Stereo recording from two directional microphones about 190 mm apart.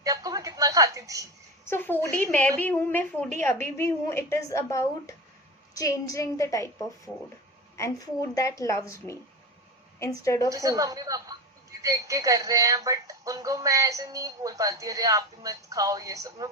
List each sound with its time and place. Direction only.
0.0 s a sound: 20° right (ahead or behind)
1.6 s a woman's voice: 10° left (ahead or behind)
10.5 s speech: 20° right (ahead or behind)